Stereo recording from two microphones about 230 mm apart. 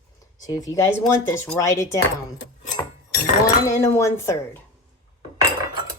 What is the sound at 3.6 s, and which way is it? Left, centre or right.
Speech, centre.